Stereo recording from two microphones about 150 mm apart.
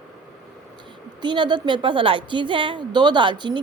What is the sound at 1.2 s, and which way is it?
A woman's voice, 30° right (ahead or behind).